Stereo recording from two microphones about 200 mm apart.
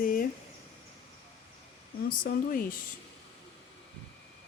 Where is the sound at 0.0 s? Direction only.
45° left (ahead or behind).